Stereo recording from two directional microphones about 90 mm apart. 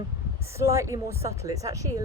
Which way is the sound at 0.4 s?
30° right (ahead or behind).